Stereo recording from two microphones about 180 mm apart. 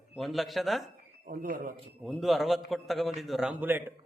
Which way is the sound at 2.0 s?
Centre (ahead or behind).